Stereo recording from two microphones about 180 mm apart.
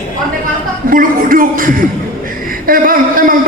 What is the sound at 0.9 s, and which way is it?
A man's voice, 50° right (ahead or behind).